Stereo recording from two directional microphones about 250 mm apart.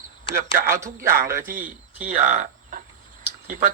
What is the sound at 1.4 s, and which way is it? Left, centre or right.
Speech, right.